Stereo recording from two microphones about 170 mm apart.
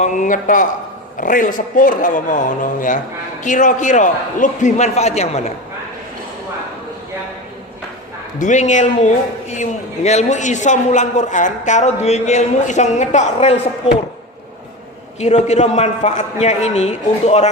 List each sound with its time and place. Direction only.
0.0 s a man's voice: 50° left (ahead or behind)
8.4 s a man's voice: 45° left (ahead or behind)
15.2 s a man's voice: 45° left (ahead or behind)